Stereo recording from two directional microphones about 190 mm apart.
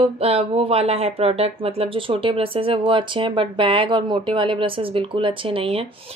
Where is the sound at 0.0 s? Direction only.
30° right (ahead or behind).